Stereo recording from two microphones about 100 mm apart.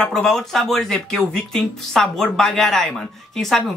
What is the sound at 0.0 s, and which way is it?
Speech, 5° left (ahead or behind).